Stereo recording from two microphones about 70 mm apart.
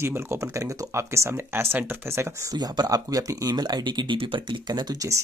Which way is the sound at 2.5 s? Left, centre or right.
Right.